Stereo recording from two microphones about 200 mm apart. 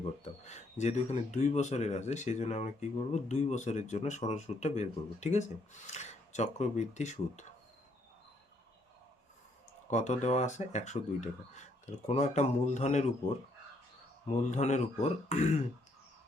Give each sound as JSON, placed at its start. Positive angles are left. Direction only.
{"t": 0.0, "sound": "speech", "side_deg": 35}
{"t": 9.9, "sound": "speech", "side_deg": 35}
{"t": 14.3, "sound": "speech", "side_deg": 35}